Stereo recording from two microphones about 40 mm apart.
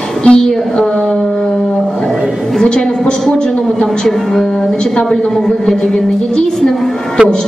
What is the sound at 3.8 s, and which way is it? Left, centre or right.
A woman's voice, centre.